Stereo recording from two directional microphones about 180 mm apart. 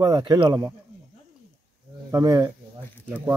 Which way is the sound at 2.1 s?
20° right (ahead or behind).